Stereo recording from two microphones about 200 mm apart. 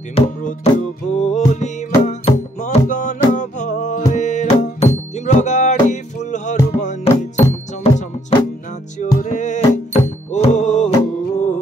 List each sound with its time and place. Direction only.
0.1 s music: 40° left (ahead or behind)
7.9 s music: 15° left (ahead or behind)
9.2 s music: 40° left (ahead or behind)